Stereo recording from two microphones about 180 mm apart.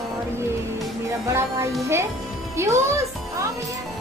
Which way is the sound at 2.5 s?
15° right (ahead or behind).